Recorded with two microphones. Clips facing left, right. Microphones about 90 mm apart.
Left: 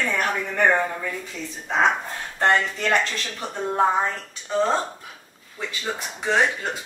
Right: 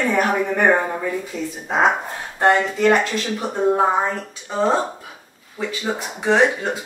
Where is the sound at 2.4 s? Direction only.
15° right (ahead or behind).